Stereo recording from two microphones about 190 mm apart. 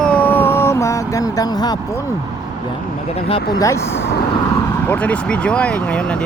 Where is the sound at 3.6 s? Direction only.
15° left (ahead or behind).